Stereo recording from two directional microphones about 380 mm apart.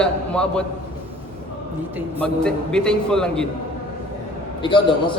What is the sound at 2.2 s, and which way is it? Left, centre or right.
A man's voice, centre.